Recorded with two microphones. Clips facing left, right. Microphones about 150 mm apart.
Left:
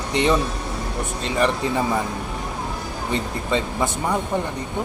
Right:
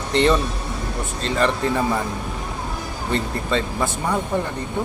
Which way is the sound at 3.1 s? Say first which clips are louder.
Right 1 dB; 15° left (ahead or behind).